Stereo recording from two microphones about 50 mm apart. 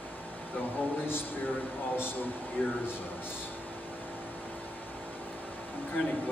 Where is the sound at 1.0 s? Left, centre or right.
Left.